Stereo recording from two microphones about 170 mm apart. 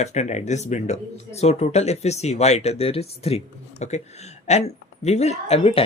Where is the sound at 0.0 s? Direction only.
40° left (ahead or behind).